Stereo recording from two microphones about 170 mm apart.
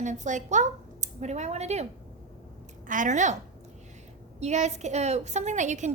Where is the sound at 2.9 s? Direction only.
50° right (ahead or behind).